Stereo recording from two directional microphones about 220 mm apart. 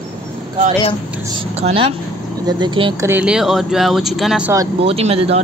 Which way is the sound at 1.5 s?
25° right (ahead or behind).